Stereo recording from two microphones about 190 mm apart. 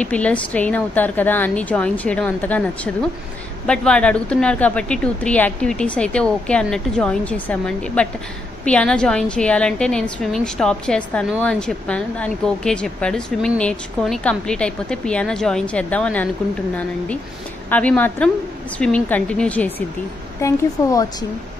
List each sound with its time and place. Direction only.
0.0 s a woman's voice: 5° left (ahead or behind)
17.6 s a woman's voice: 10° left (ahead or behind)